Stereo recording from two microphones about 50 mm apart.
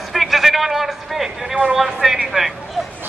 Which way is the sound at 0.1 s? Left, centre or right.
Centre.